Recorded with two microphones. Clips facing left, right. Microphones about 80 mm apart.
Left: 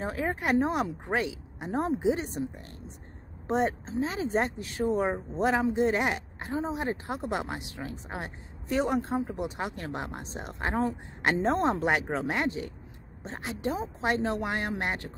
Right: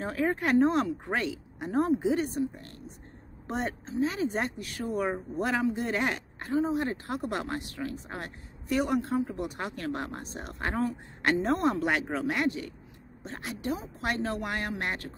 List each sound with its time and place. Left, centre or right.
0.0 s speech: centre